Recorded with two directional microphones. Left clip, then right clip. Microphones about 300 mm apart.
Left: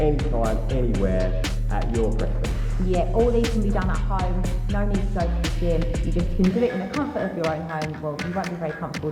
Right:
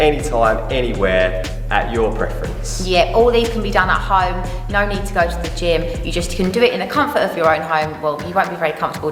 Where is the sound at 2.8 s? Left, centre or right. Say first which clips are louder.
Right 9 dB; centre.